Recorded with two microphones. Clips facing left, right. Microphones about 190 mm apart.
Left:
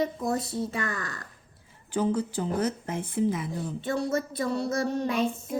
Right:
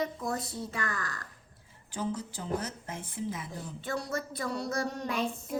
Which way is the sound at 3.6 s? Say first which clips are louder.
Left 7 dB; 25° left (ahead or behind).